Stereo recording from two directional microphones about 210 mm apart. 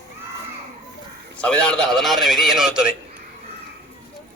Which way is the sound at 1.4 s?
5° left (ahead or behind).